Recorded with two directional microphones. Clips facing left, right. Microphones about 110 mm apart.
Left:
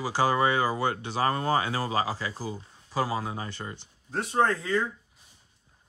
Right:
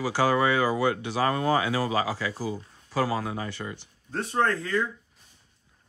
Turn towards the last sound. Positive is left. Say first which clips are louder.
# even
turn(degrees=20)  # may be behind; listen again after turning